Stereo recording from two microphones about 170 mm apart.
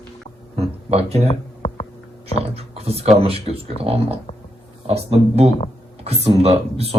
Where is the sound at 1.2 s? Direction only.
40° left (ahead or behind).